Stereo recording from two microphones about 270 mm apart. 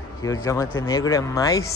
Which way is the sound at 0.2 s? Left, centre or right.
Centre.